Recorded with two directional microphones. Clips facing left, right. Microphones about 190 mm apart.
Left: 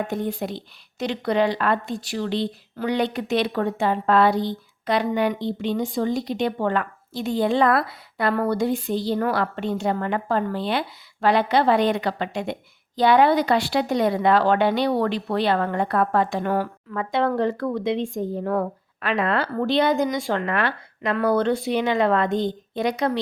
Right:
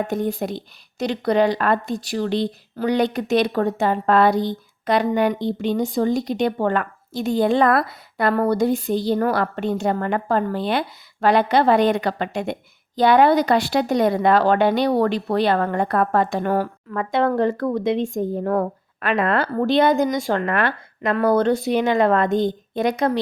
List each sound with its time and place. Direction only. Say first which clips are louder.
0.1 s speech: right 3 dB; 45° right (ahead or behind)